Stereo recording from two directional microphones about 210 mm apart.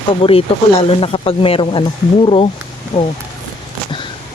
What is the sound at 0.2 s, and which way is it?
Speech, 25° left (ahead or behind).